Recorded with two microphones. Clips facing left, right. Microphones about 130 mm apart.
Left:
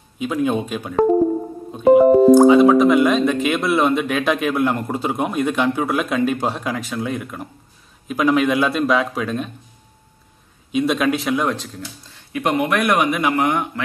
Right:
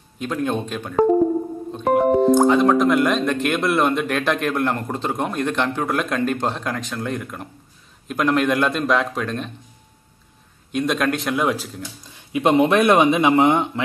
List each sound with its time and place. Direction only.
0.2 s speech: 5° left (ahead or behind)
10.7 s speech: centre (ahead or behind)
12.1 s speech: 20° right (ahead or behind)